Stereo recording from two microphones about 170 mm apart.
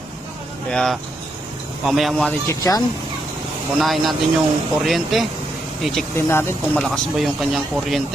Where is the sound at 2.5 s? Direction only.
20° left (ahead or behind).